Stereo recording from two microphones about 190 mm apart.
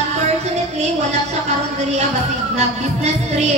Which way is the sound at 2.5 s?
35° right (ahead or behind).